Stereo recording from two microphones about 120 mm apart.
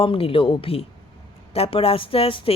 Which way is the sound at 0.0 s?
50° left (ahead or behind).